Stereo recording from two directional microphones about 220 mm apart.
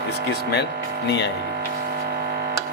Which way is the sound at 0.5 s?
50° left (ahead or behind).